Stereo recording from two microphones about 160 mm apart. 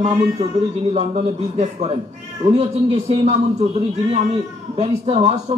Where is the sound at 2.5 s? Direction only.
40° right (ahead or behind).